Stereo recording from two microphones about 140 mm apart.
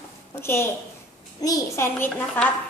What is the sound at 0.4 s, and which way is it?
A woman's voice, 15° left (ahead or behind).